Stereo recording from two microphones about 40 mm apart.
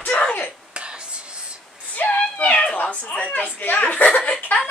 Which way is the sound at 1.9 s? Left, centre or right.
Left.